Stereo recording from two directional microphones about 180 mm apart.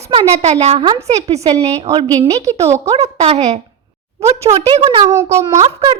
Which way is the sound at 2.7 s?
15° right (ahead or behind).